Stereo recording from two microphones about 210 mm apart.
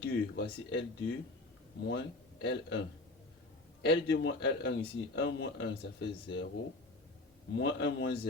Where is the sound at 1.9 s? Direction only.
55° left (ahead or behind).